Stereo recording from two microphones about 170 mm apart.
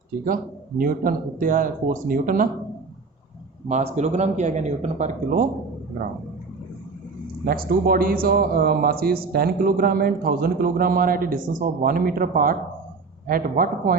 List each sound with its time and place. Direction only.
0.8 s speech: 55° right (ahead or behind)
3.7 s speech: 45° right (ahead or behind)
7.4 s a man's voice: 60° right (ahead or behind)